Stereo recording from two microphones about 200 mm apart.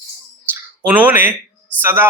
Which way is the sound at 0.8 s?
10° right (ahead or behind).